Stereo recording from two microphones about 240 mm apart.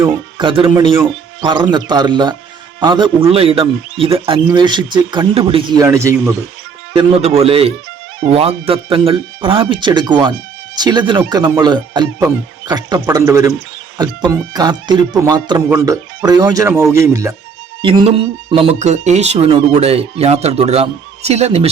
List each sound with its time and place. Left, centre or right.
0.0 s speech: centre
6.9 s speech: right